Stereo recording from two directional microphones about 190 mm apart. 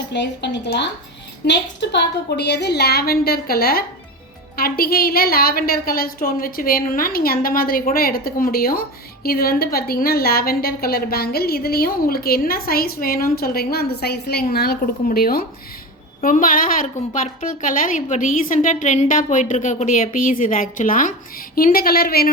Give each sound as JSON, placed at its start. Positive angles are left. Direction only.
{"t": 0.1, "sound": "a woman's voice", "side_deg": 65}